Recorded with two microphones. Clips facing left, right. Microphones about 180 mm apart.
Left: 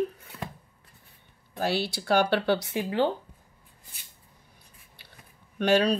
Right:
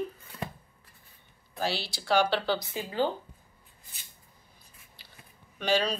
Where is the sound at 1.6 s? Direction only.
55° left (ahead or behind); by 3.0 s 70° left (ahead or behind).